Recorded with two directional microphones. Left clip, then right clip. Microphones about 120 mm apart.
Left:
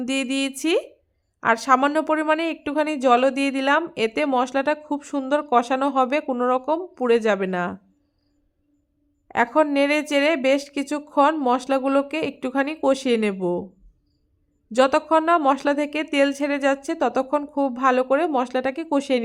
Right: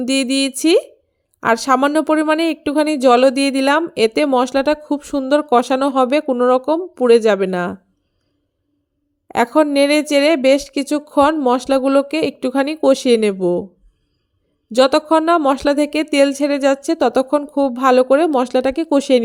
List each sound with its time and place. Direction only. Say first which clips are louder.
0.0 s speech: right 7 dB; 40° right (ahead or behind)
9.2 s speech: right 5 dB; 40° right (ahead or behind)
14.7 s speech: right 5 dB; 35° right (ahead or behind)